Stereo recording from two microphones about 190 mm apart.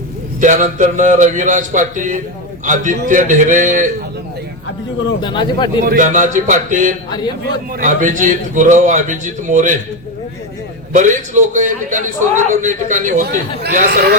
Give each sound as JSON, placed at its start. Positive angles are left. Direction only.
{"t": 0.3, "sound": "a man's voice", "side_deg": -40}
{"t": 5.2, "sound": "speech", "side_deg": 25}
{"t": 5.8, "sound": "music", "side_deg": -45}
{"t": 7.1, "sound": "speech", "side_deg": 20}
{"t": 7.7, "sound": "a man's voice", "side_deg": -45}
{"t": 10.9, "sound": "a man's voice", "side_deg": -40}
{"t": 13.2, "sound": "a man's voice", "side_deg": -60}